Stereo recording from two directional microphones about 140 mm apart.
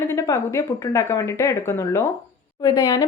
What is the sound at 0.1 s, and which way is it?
A woman's voice, 20° left (ahead or behind).